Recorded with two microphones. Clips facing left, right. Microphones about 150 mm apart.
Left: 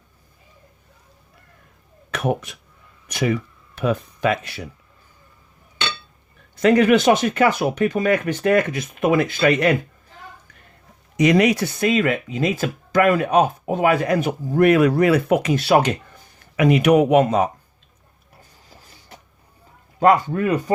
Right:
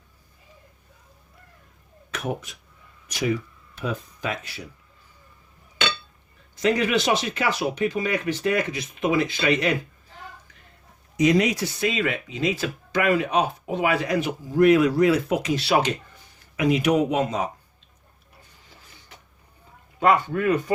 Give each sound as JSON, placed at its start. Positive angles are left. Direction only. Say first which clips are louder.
{"t": 2.0, "sound": "speech", "louder": "left 7 dB", "side_deg": 65}
{"t": 6.6, "sound": "speech", "louder": "left 7 dB", "side_deg": 55}
{"t": 11.2, "sound": "speech", "louder": "left 4 dB", "side_deg": 70}
{"t": 18.7, "sound": "creak", "louder": "left 5 dB", "side_deg": 40}
{"t": 20.0, "sound": "speech", "louder": "left 4 dB", "side_deg": 40}